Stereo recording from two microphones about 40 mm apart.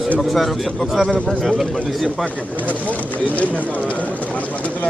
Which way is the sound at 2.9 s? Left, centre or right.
Left.